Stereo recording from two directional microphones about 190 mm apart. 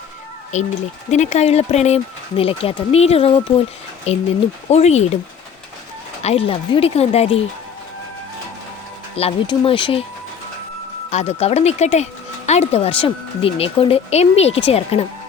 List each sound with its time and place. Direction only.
0.5 s speech: 40° left (ahead or behind)
6.2 s speech: 30° left (ahead or behind)
9.1 s speech: 30° left (ahead or behind)
11.1 s speech: 35° left (ahead or behind)